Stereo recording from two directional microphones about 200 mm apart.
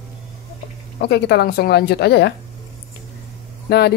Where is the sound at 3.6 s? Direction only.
55° left (ahead or behind).